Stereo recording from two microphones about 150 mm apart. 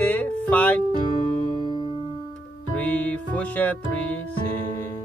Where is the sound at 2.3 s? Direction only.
10° left (ahead or behind).